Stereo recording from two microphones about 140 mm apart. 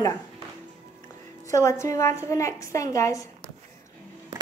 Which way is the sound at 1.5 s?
20° left (ahead or behind).